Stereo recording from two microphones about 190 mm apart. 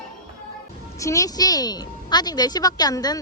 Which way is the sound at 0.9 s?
15° left (ahead or behind).